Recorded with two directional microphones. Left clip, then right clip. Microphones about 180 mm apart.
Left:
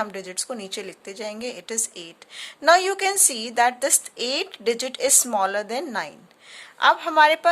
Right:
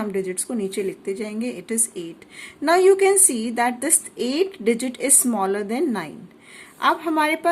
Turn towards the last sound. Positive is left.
turn(degrees=30)  # may be behind; listen again after turning